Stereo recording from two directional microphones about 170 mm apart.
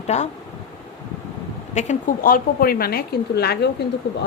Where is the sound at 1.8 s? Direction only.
45° left (ahead or behind).